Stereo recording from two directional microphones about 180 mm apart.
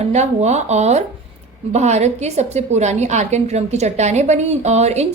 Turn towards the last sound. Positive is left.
turn(degrees=-40)  # may be behind; listen again after turning